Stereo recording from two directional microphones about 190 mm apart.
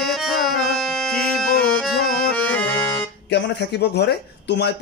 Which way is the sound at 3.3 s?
60° left (ahead or behind).